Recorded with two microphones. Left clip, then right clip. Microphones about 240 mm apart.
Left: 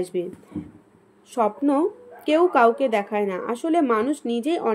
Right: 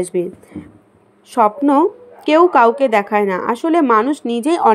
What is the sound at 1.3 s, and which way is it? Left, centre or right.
A woman's voice, centre.